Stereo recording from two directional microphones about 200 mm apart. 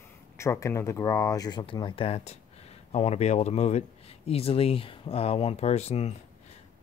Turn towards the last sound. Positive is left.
turn(degrees=30)  # may be behind; listen again after turning